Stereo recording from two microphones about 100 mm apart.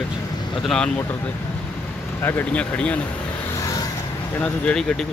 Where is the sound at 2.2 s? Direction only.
20° left (ahead or behind).